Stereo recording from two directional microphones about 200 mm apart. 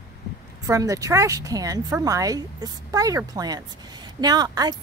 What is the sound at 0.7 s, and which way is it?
Speech, 15° right (ahead or behind).